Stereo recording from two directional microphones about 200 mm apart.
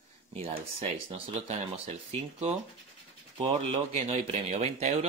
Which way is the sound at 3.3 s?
30° right (ahead or behind).